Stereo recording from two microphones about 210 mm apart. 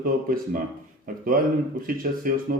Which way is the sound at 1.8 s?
40° right (ahead or behind).